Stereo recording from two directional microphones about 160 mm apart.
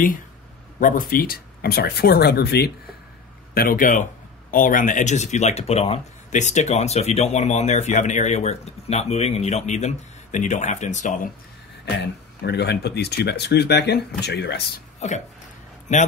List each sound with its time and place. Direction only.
0.7 s speech: 55° left (ahead or behind); by 2.7 s 85° left
3.5 s a man's voice: 60° left (ahead or behind)
11.8 s speech: 90° left
15.0 s a man's voice: 45° left (ahead or behind)